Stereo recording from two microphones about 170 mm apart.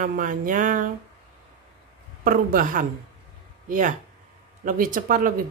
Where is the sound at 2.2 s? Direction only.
55° right (ahead or behind).